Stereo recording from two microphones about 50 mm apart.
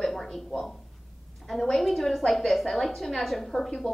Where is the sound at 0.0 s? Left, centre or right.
Centre.